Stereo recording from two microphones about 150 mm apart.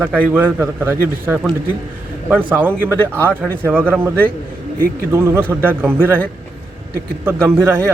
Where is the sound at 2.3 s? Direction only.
10° right (ahead or behind).